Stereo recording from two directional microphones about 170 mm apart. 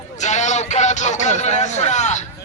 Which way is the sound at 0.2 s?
45° left (ahead or behind).